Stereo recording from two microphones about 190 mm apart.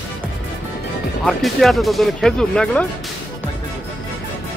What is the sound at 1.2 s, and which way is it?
Speech, centre (ahead or behind).